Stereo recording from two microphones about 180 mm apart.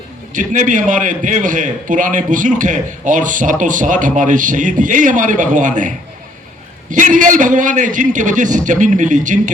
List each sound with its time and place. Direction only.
0.3 s a man's voice: 45° right (ahead or behind)
6.9 s a man's voice: 45° right (ahead or behind)